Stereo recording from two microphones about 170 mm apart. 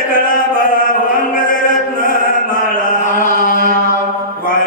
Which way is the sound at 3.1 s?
50° left (ahead or behind).